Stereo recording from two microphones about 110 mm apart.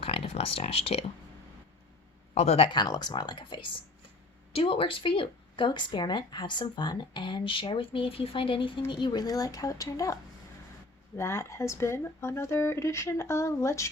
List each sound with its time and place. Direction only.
0.0 s speech: 60° left (ahead or behind)
2.3 s speech: 75° left (ahead or behind)
2.7 s a woman's voice: 40° left (ahead or behind)
4.5 s a woman's voice: 60° left (ahead or behind); by 10.2 s 30° left (ahead or behind)
11.2 s speech: 25° left (ahead or behind)